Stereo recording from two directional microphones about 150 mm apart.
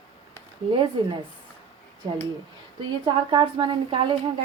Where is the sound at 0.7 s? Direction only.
30° right (ahead or behind).